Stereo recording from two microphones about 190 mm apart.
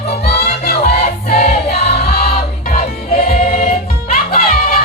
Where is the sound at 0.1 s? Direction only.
60° left (ahead or behind).